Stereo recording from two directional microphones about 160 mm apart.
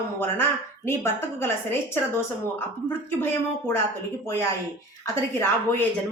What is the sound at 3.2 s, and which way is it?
Speech, 15° left (ahead or behind).